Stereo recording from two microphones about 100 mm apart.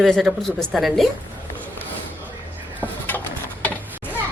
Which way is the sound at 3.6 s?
15° left (ahead or behind).